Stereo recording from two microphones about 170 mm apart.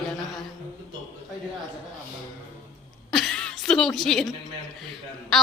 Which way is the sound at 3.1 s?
Centre (ahead or behind).